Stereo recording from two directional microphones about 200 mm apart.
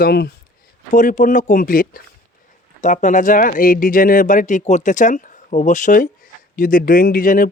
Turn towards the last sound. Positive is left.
turn(degrees=45)  # may be behind; listen again after turning